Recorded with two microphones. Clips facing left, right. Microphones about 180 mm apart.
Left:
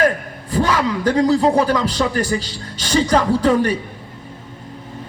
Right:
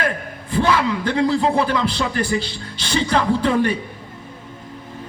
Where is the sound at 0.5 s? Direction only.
40° left (ahead or behind).